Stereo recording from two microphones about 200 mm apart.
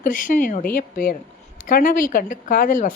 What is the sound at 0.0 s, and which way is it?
A woman's voice, 40° left (ahead or behind).